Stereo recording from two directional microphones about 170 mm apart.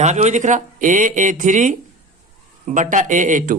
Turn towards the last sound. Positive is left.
turn(degrees=-50)  # may be behind; listen again after turning